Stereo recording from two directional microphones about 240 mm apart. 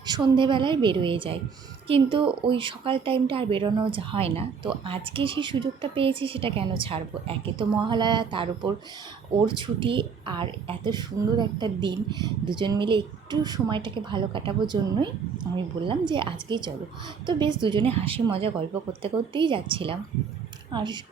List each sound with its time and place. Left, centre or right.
0.0 s a woman's voice: centre